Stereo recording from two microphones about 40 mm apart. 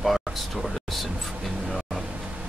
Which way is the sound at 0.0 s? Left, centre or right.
Centre.